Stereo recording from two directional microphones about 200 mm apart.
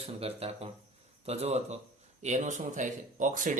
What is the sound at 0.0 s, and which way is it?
A man's voice, 30° right (ahead or behind).